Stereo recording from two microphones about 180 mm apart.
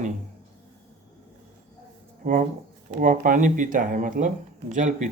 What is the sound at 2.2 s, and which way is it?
Speech, 45° right (ahead or behind).